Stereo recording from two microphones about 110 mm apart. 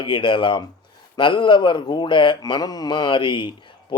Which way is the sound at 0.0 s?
50° left (ahead or behind).